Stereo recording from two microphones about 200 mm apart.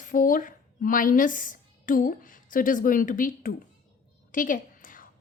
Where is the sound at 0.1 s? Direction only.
40° left (ahead or behind).